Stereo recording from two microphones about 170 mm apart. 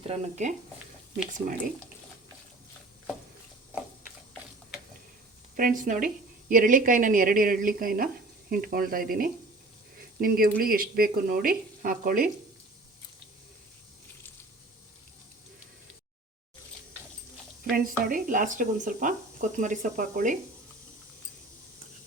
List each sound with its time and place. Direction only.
0.1 s speech: 45° right (ahead or behind)
5.5 s speech: 55° right (ahead or behind)
17.6 s speech: 60° right (ahead or behind)